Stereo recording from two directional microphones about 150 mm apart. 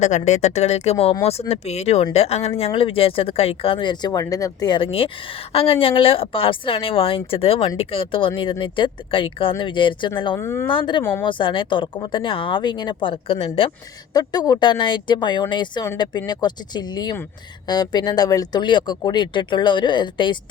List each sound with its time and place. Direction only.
0.0 s speech: 50° left (ahead or behind); by 10.1 s 35° left (ahead or behind)
10.3 s speech: 15° left (ahead or behind)
10.7 s speech: 35° left (ahead or behind)
14.1 s speech: 25° left (ahead or behind)